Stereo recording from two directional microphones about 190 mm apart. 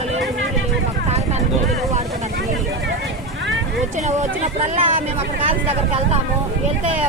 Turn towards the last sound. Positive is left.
turn(degrees=-35)  # may be behind; listen again after turning